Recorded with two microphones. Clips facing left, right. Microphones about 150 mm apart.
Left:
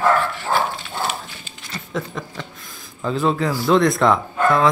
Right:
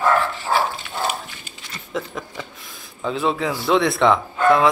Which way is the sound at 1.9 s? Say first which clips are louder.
Even; 5° right (ahead or behind).